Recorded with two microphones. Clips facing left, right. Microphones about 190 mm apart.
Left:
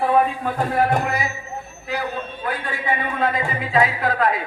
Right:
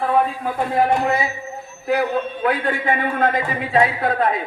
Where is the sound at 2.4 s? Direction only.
60° right (ahead or behind).